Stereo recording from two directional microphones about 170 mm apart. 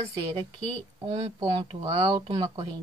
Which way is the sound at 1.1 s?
25° right (ahead or behind).